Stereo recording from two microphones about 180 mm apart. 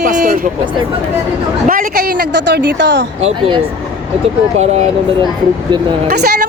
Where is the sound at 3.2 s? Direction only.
35° right (ahead or behind).